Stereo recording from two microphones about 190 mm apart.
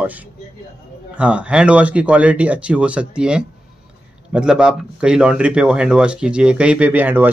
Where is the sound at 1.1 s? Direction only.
5° right (ahead or behind).